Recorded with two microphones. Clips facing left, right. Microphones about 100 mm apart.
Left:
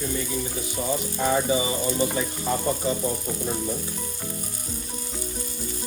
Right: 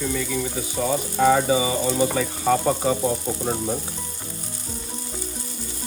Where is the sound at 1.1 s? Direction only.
90° right.